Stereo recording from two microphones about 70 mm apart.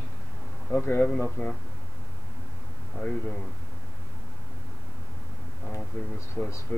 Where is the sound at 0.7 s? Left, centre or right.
Left.